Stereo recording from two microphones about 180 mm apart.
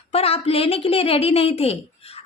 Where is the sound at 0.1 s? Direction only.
35° left (ahead or behind).